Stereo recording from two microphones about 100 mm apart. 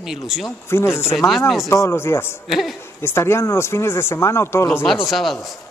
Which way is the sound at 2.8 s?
25° left (ahead or behind).